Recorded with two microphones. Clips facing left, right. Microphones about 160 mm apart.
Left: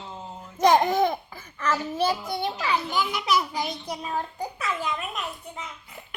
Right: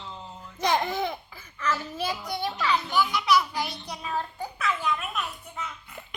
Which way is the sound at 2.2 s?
25° left (ahead or behind).